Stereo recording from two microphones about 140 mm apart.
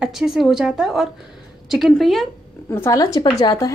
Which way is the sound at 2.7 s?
20° left (ahead or behind).